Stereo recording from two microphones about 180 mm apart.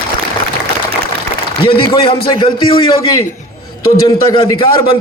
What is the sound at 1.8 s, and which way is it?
A man's voice, 30° left (ahead or behind).